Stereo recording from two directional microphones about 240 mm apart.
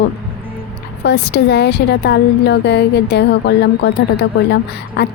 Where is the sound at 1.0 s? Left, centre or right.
Left.